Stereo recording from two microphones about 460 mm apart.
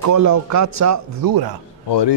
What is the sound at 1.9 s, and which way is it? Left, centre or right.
Speech, left.